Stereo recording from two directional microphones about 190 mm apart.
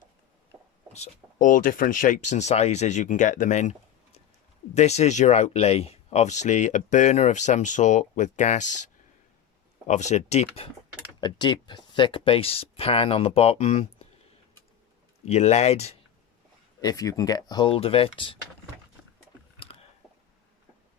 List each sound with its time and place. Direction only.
0.9 s speech: 40° left (ahead or behind)
15.2 s speech: 35° left (ahead or behind)
16.8 s speech: 20° left (ahead or behind)